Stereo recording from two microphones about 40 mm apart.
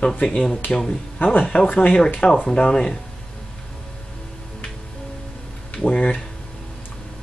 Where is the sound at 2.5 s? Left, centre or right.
Left.